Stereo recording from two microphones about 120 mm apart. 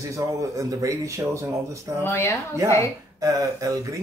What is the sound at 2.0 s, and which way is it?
Speech, 20° left (ahead or behind).